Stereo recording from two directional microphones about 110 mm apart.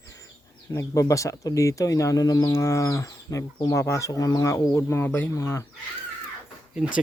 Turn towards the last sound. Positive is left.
turn(degrees=-10)  # may be behind; listen again after turning